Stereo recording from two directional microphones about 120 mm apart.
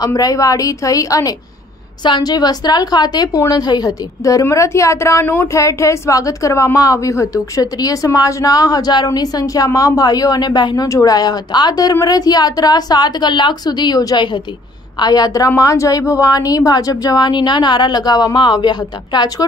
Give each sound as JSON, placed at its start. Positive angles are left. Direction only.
{"t": 0.0, "sound": "a woman's voice", "side_deg": 30}